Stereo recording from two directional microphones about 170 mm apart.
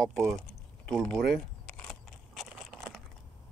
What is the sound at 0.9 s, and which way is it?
Biting, 5° left (ahead or behind).